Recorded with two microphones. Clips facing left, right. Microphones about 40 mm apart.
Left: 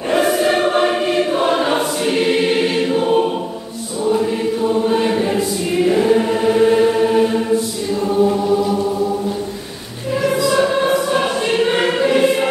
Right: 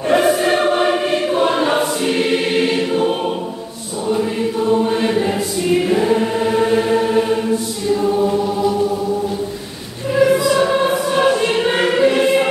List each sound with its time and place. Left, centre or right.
11.7 s choir: centre